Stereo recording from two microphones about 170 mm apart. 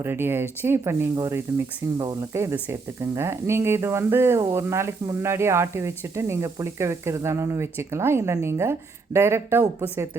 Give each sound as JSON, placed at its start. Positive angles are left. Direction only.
{"t": 0.0, "sound": "speech", "side_deg": -15}